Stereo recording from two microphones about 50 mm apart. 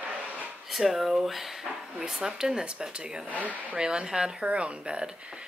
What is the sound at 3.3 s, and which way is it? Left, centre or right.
Speech, right.